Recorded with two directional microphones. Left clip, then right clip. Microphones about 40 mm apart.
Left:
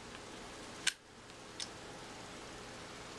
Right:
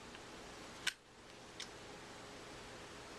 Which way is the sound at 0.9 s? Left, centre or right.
Right.